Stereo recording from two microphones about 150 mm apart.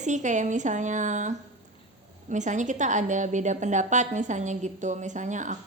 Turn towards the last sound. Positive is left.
turn(degrees=-55)  # may be behind; listen again after turning